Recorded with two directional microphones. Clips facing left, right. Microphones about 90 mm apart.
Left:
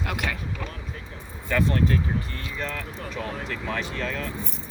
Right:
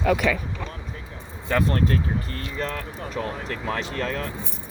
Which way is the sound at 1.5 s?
40° right (ahead or behind).